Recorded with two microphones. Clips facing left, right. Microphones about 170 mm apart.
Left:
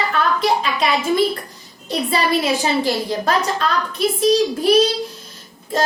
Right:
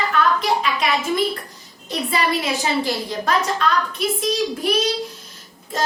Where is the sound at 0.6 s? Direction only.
30° left (ahead or behind).